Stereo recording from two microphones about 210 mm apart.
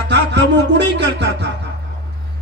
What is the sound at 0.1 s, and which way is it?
Music, 55° right (ahead or behind).